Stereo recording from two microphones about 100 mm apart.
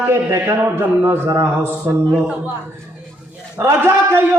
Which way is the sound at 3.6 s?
25° right (ahead or behind).